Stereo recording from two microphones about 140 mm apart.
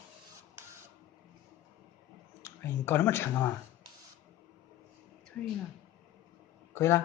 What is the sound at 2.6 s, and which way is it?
Speech, 15° left (ahead or behind).